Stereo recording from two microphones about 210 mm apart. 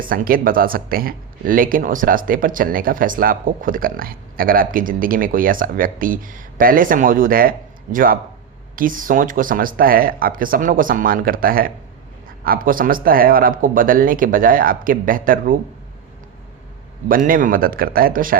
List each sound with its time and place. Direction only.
0.0 s speech: 40° right (ahead or behind)
17.1 s speech: 40° right (ahead or behind)